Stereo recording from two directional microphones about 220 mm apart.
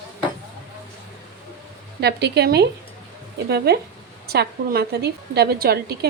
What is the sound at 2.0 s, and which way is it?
Speech, 50° right (ahead or behind).